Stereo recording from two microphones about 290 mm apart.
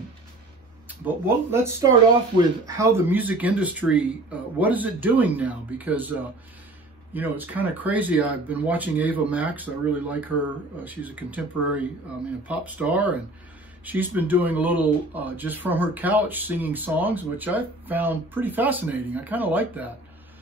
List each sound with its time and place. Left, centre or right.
0.8 s speech: centre
7.2 s speech: centre